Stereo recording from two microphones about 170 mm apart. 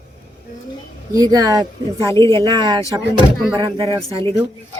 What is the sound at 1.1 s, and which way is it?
Speech, 20° right (ahead or behind).